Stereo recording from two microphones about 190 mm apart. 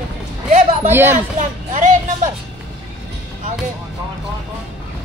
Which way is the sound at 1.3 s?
40° right (ahead or behind).